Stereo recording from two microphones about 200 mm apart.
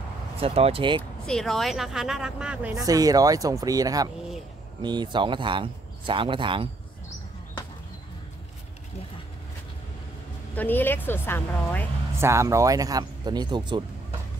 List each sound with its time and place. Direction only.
0.4 s speech: 30° right (ahead or behind)
1.2 s speech: centre (ahead or behind)
2.8 s speech: 15° right (ahead or behind)
10.5 s speech: 10° left (ahead or behind)
12.2 s speech: 15° right (ahead or behind)